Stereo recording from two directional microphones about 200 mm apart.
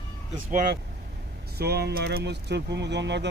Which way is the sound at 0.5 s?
40° right (ahead or behind).